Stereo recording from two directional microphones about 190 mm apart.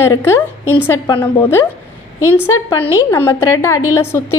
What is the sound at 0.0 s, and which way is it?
A woman's voice, 15° left (ahead or behind).